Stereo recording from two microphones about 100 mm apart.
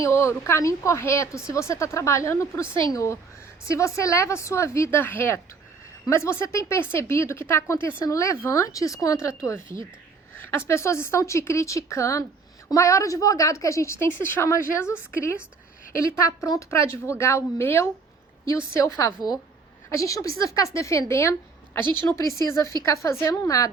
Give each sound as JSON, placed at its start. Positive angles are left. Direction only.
{"t": 0.0, "sound": "speech", "side_deg": 30}